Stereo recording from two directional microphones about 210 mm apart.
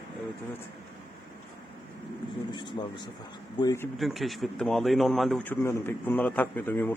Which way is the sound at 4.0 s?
Centre (ahead or behind).